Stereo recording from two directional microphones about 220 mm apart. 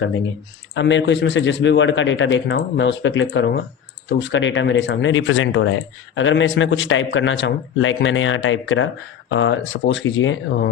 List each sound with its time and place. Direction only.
0.7 s speech: 55° left (ahead or behind)